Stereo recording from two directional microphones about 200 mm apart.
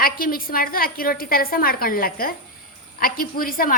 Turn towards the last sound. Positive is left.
turn(degrees=45)  # may be behind; listen again after turning